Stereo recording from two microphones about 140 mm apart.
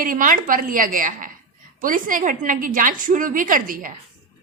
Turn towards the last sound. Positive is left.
turn(degrees=-75)  # may be behind; listen again after turning